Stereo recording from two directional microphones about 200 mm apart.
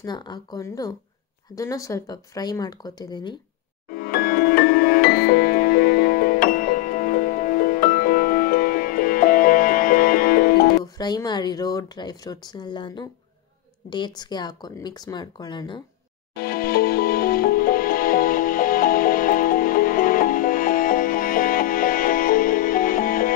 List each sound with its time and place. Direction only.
0.0 s speech: 20° left (ahead or behind)
4.0 s music: 50° left (ahead or behind)
10.8 s speech: 20° left (ahead or behind)
16.3 s music: 50° left (ahead or behind)